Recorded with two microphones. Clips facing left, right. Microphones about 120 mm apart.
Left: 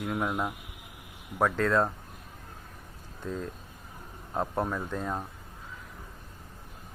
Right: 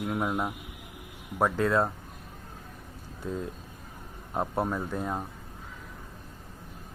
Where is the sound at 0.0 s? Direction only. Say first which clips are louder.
Right 1 dB; 10° right (ahead or behind).